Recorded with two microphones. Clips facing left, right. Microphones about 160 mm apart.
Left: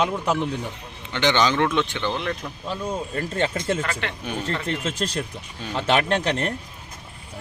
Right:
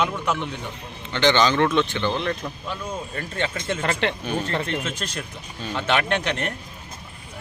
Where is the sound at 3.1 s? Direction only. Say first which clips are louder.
Left 3 dB; 35° left (ahead or behind).